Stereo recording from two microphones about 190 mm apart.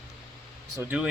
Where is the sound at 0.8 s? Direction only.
5° right (ahead or behind).